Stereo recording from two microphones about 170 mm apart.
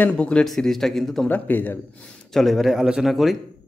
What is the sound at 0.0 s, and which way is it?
Speech, 5° left (ahead or behind).